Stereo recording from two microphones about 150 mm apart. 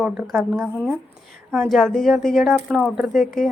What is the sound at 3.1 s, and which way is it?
Speech, 65° left (ahead or behind).